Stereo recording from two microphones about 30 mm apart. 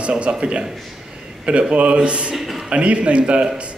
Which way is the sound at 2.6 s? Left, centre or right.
Right.